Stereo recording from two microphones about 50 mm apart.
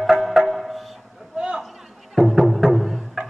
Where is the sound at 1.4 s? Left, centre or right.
Centre.